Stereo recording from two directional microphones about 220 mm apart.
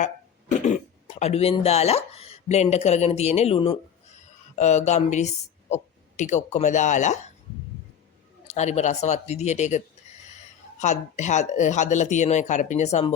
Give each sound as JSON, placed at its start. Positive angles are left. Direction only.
{"t": 0.6, "sound": "speech", "side_deg": 30}
{"t": 8.4, "sound": "speech", "side_deg": 30}